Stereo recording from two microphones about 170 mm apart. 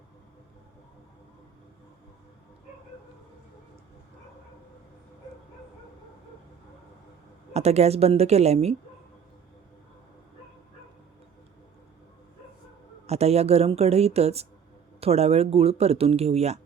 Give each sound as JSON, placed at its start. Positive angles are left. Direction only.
{"t": 7.5, "sound": "speech", "side_deg": -40}
{"t": 13.1, "sound": "speech", "side_deg": -40}